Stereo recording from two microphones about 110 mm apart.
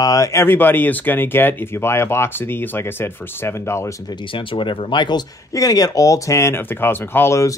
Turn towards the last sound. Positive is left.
turn(degrees=25)  # may be behind; listen again after turning